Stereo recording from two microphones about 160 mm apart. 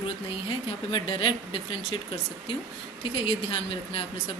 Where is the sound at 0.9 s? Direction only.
30° left (ahead or behind).